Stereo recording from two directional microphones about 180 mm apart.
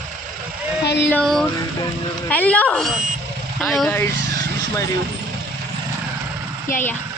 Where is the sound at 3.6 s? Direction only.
5° left (ahead or behind).